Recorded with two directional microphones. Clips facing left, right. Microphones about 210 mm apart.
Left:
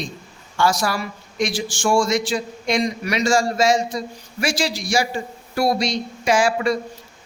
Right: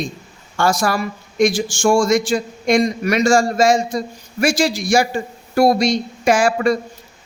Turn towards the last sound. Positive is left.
turn(degrees=-50)  # may be behind; listen again after turning